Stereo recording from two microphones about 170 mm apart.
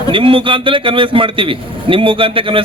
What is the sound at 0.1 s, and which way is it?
A man's voice, 30° right (ahead or behind).